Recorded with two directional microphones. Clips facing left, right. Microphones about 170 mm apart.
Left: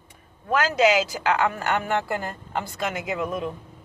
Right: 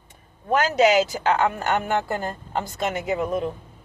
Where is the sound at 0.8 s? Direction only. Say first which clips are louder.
Right 2 dB; 45° right (ahead or behind).